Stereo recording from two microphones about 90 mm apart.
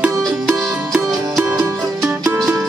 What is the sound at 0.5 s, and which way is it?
Music, 10° right (ahead or behind).